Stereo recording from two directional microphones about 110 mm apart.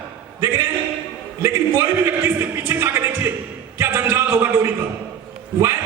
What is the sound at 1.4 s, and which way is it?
A man's voice, 25° right (ahead or behind).